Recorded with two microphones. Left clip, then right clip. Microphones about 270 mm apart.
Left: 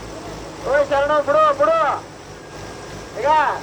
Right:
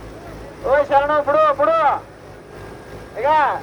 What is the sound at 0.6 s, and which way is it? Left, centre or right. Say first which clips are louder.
Speech: right 2 dB; right.